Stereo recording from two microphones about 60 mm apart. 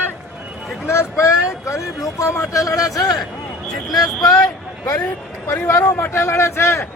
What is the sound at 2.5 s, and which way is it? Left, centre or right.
Speech, left.